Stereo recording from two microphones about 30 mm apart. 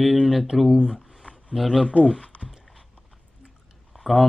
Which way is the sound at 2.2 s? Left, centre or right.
Left.